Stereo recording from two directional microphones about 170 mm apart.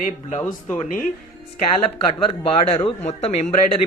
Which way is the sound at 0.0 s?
50° left (ahead or behind).